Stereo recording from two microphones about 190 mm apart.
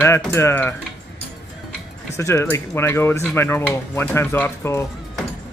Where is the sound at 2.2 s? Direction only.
15° left (ahead or behind).